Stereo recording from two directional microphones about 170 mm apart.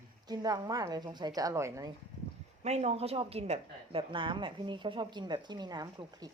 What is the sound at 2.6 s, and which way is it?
Speech, 40° right (ahead or behind).